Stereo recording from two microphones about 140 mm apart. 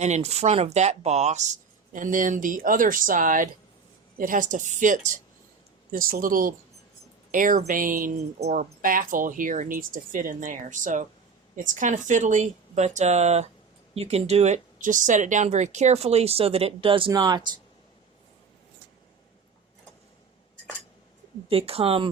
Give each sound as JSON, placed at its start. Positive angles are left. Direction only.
{"t": 0.0, "sound": "speech", "side_deg": -55}
{"t": 5.9, "sound": "speech", "side_deg": -90}
{"t": 7.3, "sound": "speech", "side_deg": -75}
{"t": 8.4, "sound": "speech", "side_deg": -50}
{"t": 8.8, "sound": "speech", "side_deg": -75}
{"t": 17.1, "sound": "speech", "side_deg": -25}
{"t": 21.5, "sound": "speech", "side_deg": -45}